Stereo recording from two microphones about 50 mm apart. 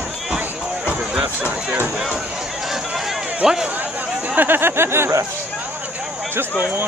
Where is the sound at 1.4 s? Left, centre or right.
Right.